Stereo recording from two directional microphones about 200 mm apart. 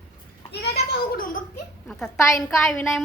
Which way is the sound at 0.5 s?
55° left (ahead or behind).